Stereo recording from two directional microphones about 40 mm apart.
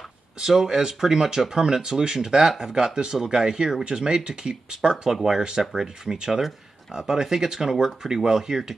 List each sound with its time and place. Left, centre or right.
0.4 s speech: centre